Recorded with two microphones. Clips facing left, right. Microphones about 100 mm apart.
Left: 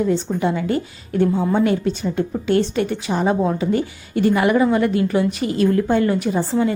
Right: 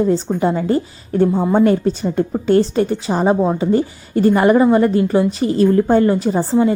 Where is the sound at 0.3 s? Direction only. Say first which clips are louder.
Right 4 dB; 35° right (ahead or behind).